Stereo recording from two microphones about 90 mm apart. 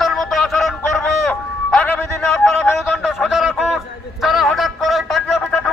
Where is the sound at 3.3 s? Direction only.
5° right (ahead or behind).